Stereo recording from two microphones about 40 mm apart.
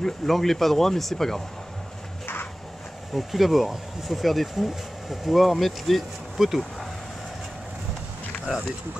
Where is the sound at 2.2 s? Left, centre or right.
Left.